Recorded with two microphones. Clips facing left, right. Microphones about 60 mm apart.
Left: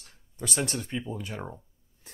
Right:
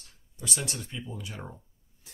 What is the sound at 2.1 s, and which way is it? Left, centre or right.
Spray, left.